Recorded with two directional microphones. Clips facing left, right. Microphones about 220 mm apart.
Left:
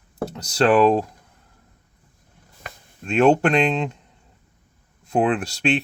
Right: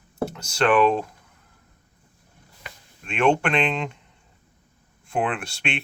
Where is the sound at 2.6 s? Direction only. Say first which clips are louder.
Left 7 dB; 40° left (ahead or behind).